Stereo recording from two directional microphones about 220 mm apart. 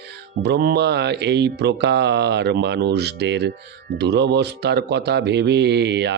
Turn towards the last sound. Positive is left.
turn(degrees=-50)  # may be behind; listen again after turning